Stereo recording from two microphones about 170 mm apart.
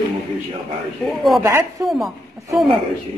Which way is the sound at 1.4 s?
15° right (ahead or behind).